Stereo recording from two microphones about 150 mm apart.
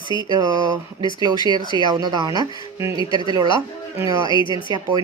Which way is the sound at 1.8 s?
30° right (ahead or behind).